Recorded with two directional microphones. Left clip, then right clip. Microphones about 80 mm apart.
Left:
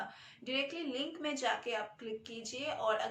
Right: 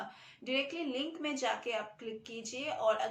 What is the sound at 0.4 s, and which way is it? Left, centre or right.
Speech, right.